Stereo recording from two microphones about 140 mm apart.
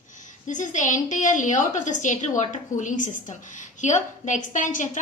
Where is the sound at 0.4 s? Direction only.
65° left (ahead or behind).